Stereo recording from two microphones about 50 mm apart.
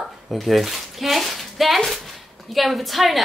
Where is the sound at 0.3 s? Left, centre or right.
Centre.